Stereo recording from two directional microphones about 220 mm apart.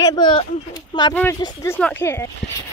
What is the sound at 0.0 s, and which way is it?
Speech, 20° left (ahead or behind).